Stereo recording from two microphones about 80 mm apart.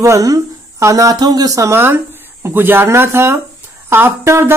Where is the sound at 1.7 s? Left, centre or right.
Right.